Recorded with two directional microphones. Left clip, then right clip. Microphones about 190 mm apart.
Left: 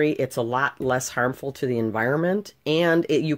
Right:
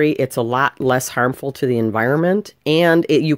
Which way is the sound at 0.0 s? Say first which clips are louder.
Right 6 dB; 35° right (ahead or behind).